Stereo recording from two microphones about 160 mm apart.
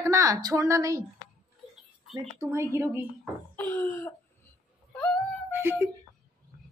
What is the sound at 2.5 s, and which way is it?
Speech, 15° right (ahead or behind).